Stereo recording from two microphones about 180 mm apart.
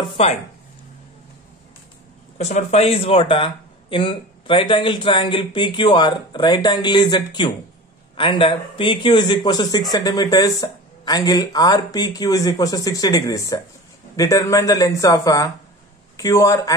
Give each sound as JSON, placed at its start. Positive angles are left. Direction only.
{"t": 0.2, "sound": "speech", "side_deg": 30}
{"t": 2.3, "sound": "a man's voice", "side_deg": 40}